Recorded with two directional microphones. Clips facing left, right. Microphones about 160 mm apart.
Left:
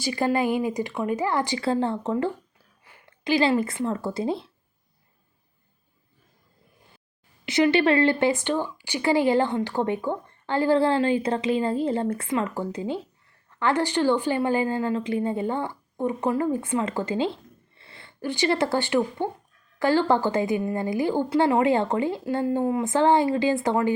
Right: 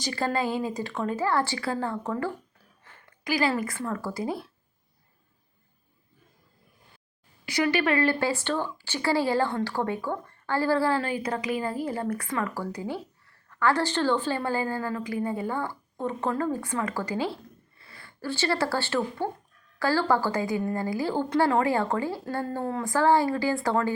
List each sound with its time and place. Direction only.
0.0 s speech: 10° left (ahead or behind)
7.4 s speech: 25° left (ahead or behind)